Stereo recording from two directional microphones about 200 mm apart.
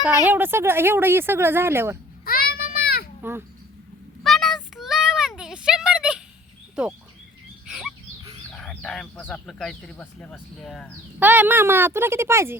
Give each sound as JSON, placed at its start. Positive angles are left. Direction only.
{"t": 0.0, "sound": "speech", "side_deg": -10}
{"t": 2.2, "sound": "children playing", "side_deg": 50}
{"t": 3.2, "sound": "speech", "side_deg": -10}
{"t": 4.2, "sound": "child singing", "side_deg": 0}
{"t": 5.4, "sound": "a sound", "side_deg": -5}
{"t": 8.5, "sound": "speech", "side_deg": 5}
{"t": 11.2, "sound": "speech", "side_deg": -10}